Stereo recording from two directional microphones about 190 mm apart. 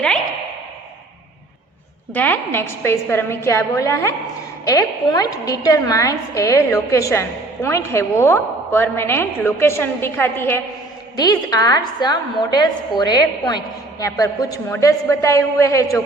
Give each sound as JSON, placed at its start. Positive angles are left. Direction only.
{"t": 2.1, "sound": "a woman's voice", "side_deg": 10}